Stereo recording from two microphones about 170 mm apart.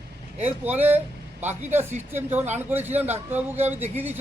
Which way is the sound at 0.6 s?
10° right (ahead or behind).